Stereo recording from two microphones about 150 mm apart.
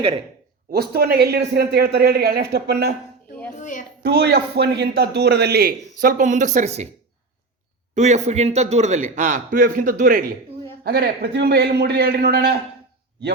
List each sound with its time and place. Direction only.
0.7 s a man's voice: 90° right
3.6 s a woman's voice: 60° left (ahead or behind)
4.0 s a man's voice: 90° right; by 6.8 s 50° right (ahead or behind)
7.9 s a man's voice: 50° right (ahead or behind); by 10.2 s 70° right (ahead or behind)
10.8 s a man's voice: 90° right